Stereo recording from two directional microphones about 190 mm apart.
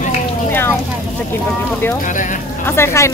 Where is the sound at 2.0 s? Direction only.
40° left (ahead or behind).